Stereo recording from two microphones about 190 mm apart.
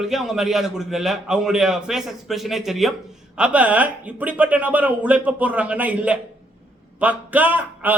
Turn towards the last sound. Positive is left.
turn(degrees=-10)  # may be behind; listen again after turning